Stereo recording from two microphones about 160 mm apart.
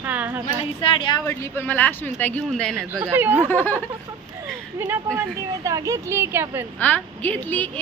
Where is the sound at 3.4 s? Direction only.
15° left (ahead or behind).